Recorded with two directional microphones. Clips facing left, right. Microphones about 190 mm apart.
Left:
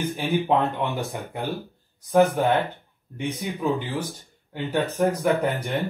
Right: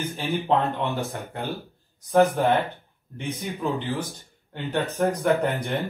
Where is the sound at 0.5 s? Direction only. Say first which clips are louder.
Right 2 dB; 15° left (ahead or behind).